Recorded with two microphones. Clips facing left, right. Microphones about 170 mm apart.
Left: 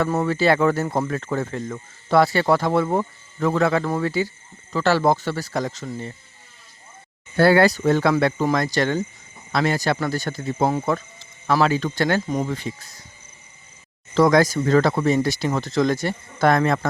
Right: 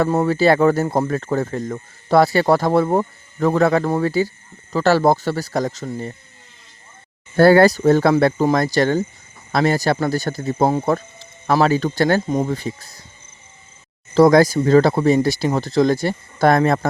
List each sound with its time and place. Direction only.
0.1 s speech: 35° right (ahead or behind)
7.3 s speech: 40° right (ahead or behind)
12.2 s speech: 20° right (ahead or behind)
12.5 s speech: 35° right (ahead or behind)
14.1 s speech: 35° right (ahead or behind)